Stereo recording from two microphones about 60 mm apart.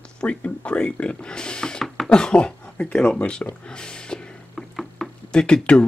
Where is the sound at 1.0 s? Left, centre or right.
Centre.